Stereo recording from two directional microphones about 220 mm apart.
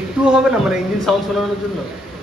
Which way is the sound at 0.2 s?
5° right (ahead or behind).